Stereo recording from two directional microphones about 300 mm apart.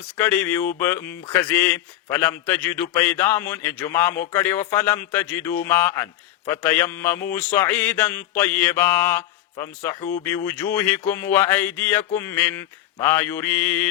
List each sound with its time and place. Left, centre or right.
0.2 s speech: centre